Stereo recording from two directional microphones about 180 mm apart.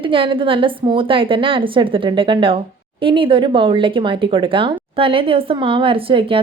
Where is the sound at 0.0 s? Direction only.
30° right (ahead or behind).